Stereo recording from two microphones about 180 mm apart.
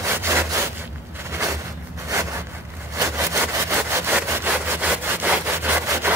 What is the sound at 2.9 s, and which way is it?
Sawing, 15° right (ahead or behind).